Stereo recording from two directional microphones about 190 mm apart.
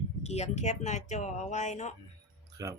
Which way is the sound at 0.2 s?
35° left (ahead or behind).